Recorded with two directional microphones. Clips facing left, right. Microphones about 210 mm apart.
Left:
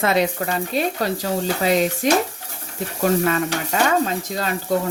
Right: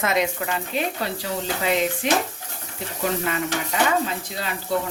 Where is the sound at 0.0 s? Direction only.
35° left (ahead or behind).